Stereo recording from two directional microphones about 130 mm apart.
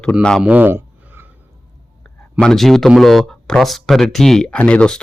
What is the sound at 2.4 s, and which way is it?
Speech, 5° left (ahead or behind).